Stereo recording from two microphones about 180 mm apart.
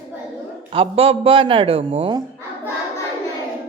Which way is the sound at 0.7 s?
30° right (ahead or behind).